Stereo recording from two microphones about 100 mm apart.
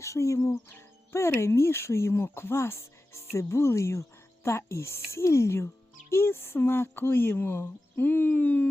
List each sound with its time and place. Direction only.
0.0 s speech: 30° left (ahead or behind)